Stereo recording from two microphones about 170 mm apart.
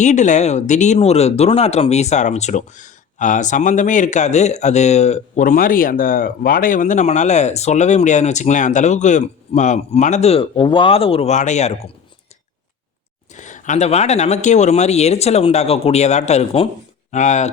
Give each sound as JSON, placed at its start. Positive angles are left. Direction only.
{"t": 0.0, "sound": "speech", "side_deg": 45}
{"t": 13.3, "sound": "speech", "side_deg": 45}